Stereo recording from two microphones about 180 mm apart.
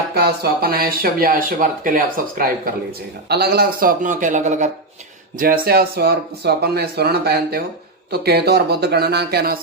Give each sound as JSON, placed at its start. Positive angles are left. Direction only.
{"t": 0.1, "sound": "speech", "side_deg": -60}
{"t": 3.2, "sound": "a man's voice", "side_deg": -65}
{"t": 5.4, "sound": "speech", "side_deg": -55}